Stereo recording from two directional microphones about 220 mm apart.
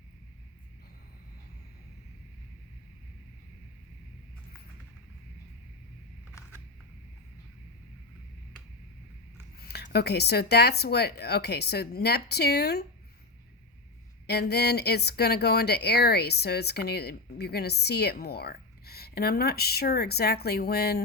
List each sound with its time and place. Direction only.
9.6 s speech: 45° left (ahead or behind)
14.3 s speech: 45° left (ahead or behind)